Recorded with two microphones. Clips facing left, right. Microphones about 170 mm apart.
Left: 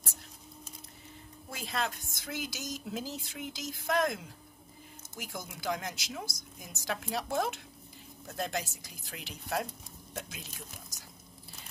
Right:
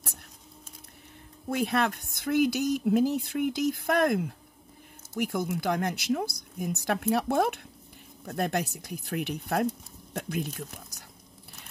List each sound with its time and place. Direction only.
1.5 s speech: 60° right (ahead or behind)